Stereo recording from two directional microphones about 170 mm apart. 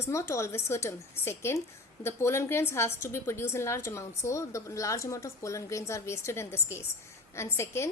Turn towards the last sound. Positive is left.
turn(degrees=15)  # may be behind; listen again after turning